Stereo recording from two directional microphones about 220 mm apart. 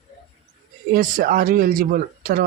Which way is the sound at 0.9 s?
40° right (ahead or behind).